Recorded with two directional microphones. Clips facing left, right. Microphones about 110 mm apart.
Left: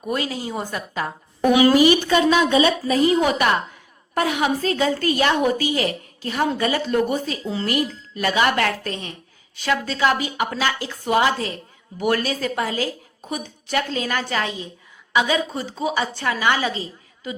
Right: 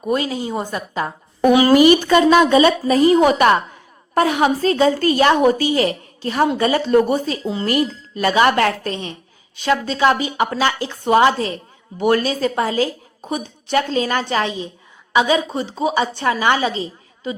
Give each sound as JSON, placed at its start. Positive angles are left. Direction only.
{"t": 0.1, "sound": "a woman's voice", "side_deg": -25}
{"t": 1.7, "sound": "a woman's voice", "side_deg": -50}